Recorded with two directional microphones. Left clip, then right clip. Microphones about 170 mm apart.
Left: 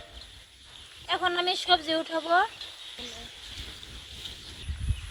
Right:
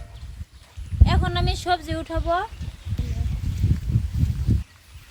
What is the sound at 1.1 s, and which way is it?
Speech, 25° left (ahead or behind).